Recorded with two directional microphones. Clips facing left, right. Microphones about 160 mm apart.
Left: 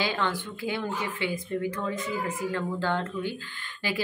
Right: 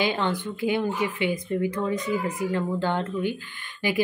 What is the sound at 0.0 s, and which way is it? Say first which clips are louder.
A woman's voice: right 4 dB; 20° right (ahead or behind).